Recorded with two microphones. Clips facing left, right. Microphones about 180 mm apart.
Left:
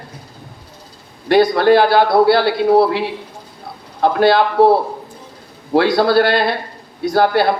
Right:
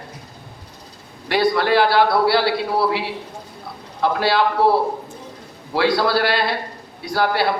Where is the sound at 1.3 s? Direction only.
45° left (ahead or behind).